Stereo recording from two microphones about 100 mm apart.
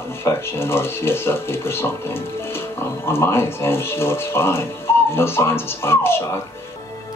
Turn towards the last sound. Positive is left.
turn(degrees=25)  # may be behind; listen again after turning